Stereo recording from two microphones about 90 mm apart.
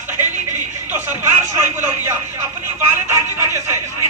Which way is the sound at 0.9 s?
25° right (ahead or behind).